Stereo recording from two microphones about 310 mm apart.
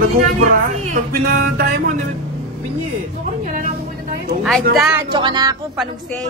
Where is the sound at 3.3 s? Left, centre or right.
Right.